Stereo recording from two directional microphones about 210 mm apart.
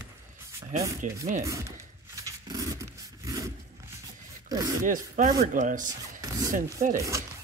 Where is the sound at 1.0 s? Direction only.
40° right (ahead or behind).